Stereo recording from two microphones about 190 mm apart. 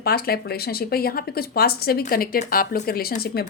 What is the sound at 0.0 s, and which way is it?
Speech, 55° left (ahead or behind).